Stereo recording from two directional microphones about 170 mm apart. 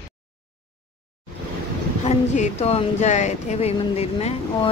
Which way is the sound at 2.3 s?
40° left (ahead or behind).